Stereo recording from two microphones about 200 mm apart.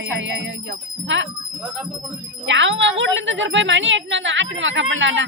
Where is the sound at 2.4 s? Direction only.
70° right (ahead or behind).